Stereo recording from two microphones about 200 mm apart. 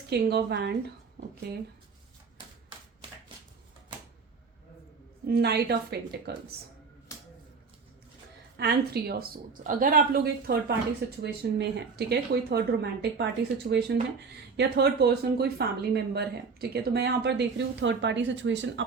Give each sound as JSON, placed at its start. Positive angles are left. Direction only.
{"t": 0.1, "sound": "speech", "side_deg": -55}
{"t": 5.3, "sound": "speech", "side_deg": -55}
{"t": 8.5, "sound": "speech", "side_deg": -55}